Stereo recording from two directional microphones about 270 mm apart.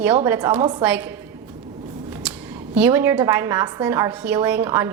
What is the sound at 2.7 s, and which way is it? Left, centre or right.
A woman's voice, centre.